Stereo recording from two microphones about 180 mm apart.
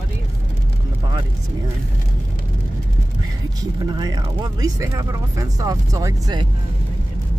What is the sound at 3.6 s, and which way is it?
Speech, 20° right (ahead or behind).